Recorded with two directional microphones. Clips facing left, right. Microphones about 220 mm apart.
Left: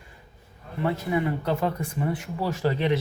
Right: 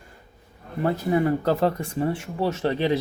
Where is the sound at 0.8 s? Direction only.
35° right (ahead or behind).